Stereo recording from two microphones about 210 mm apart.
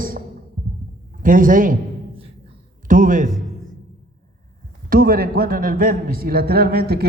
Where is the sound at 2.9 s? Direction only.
40° right (ahead or behind).